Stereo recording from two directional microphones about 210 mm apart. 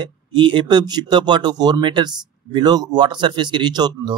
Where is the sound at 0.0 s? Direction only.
20° right (ahead or behind).